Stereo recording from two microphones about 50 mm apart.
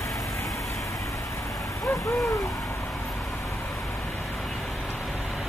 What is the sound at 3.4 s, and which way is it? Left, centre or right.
Vehicle, left.